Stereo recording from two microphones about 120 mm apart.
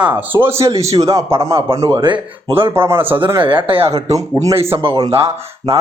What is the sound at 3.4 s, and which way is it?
Speech, 45° right (ahead or behind).